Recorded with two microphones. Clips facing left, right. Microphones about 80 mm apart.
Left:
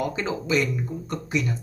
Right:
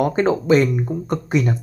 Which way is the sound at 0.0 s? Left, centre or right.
Right.